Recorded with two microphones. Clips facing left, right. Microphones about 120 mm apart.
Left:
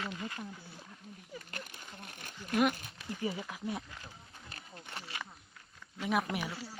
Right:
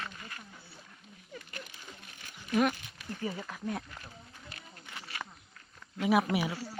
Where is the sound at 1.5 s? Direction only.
50° left (ahead or behind).